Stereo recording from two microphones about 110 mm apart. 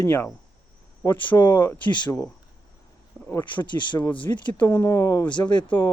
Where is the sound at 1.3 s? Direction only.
20° left (ahead or behind).